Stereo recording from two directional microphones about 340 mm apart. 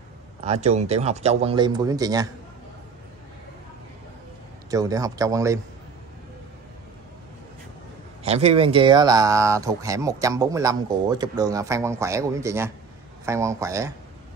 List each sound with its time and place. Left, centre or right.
0.5 s speech: centre
4.6 s speech: centre
8.2 s speech: centre